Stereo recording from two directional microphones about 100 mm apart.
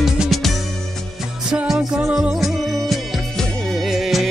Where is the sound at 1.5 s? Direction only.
5° right (ahead or behind).